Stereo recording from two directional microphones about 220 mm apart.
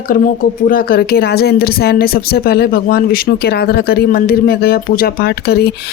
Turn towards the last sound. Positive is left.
turn(degrees=50)  # may be behind; listen again after turning